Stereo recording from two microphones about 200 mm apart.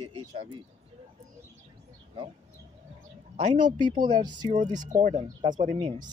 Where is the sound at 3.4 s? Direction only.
35° right (ahead or behind).